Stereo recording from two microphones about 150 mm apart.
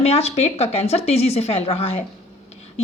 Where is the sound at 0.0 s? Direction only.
45° left (ahead or behind).